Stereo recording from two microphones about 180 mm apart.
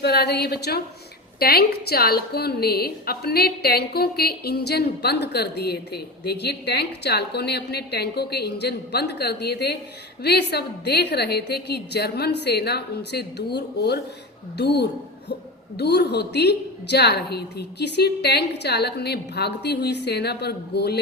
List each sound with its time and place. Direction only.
0.0 s a woman's voice: 65° left (ahead or behind)